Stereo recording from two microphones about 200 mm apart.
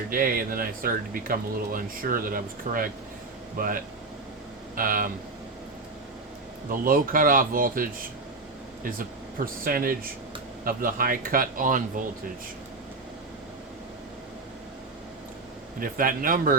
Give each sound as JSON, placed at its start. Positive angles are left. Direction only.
{"t": 0.1, "sound": "speech", "side_deg": -45}
{"t": 6.7, "sound": "speech", "side_deg": -45}
{"t": 15.8, "sound": "speech", "side_deg": -45}